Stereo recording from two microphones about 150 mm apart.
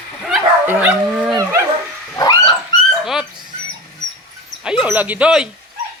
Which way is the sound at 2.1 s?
25° left (ahead or behind).